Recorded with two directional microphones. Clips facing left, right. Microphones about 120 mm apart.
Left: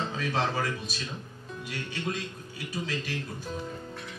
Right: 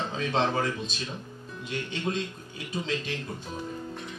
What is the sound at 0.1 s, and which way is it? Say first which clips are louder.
Speech: right 3 dB; 25° right (ahead or behind).